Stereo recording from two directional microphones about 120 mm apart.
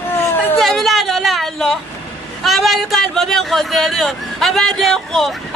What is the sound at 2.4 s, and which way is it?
Speech, centre (ahead or behind).